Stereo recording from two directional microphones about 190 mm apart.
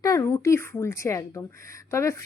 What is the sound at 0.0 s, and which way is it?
A woman's voice, 15° left (ahead or behind).